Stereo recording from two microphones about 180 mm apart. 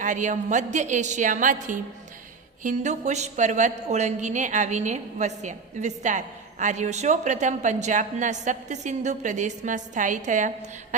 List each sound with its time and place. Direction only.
0.0 s a woman's voice: 45° right (ahead or behind)